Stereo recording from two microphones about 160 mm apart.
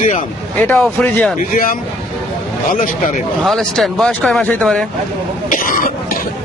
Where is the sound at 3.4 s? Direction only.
Centre (ahead or behind).